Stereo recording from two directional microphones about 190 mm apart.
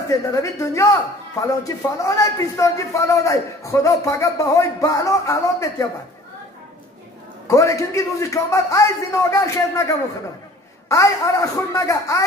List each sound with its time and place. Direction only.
0.1 s a man's voice: 15° left (ahead or behind)
7.4 s a man's voice: 15° left (ahead or behind)